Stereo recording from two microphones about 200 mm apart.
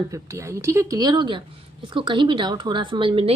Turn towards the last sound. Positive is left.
turn(degrees=-25)  # may be behind; listen again after turning